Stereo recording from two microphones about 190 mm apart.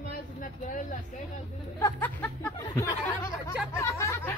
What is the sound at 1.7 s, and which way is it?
Speech, 15° left (ahead or behind).